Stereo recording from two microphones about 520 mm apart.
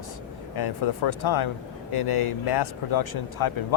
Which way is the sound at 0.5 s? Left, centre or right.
Left.